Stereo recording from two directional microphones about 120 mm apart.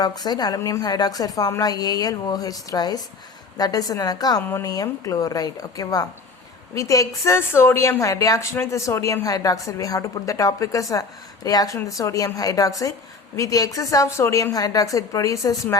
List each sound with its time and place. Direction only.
0.0 s speech: 35° left (ahead or behind)
4.4 s a woman's voice: 20° left (ahead or behind)
4.7 s a woman's voice: 30° left (ahead or behind)